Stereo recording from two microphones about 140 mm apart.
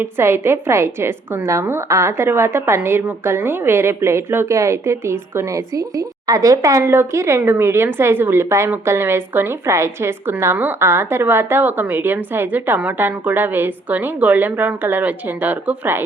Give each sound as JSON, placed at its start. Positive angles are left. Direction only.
{"t": 0.0, "sound": "a woman's voice", "side_deg": -15}